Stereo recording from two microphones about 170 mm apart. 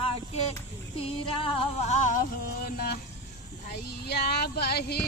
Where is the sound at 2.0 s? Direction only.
50° left (ahead or behind).